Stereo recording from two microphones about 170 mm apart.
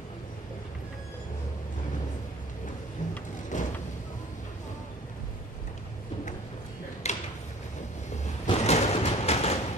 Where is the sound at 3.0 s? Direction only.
45° left (ahead or behind).